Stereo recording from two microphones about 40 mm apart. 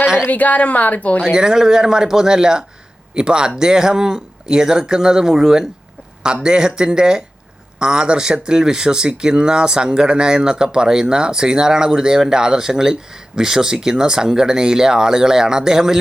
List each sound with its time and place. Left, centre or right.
0.3 s speech: left
1.2 s speech: centre